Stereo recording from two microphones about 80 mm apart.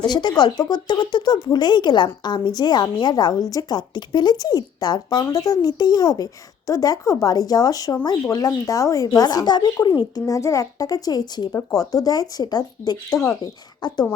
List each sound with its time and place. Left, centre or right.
0.0 s speech: left
9.0 s speech: left